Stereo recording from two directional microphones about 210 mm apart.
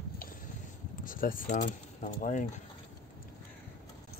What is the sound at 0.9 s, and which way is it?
Speech, 40° left (ahead or behind).